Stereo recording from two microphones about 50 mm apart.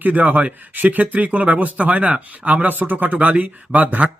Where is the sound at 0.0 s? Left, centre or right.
Right.